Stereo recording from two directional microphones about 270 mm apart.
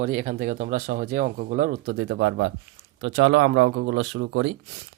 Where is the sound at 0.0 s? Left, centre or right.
Right.